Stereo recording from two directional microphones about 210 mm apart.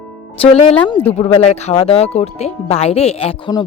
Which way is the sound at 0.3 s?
25° left (ahead or behind).